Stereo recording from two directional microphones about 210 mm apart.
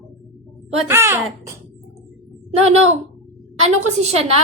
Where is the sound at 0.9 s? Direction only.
10° right (ahead or behind).